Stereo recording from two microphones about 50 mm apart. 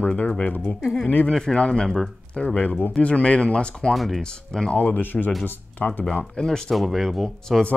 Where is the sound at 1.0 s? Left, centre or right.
Left.